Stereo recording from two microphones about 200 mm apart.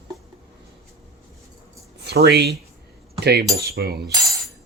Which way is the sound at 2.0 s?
55° right (ahead or behind).